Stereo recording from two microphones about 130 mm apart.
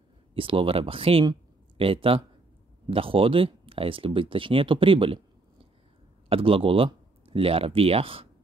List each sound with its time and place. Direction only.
0.3 s speech: 45° right (ahead or behind)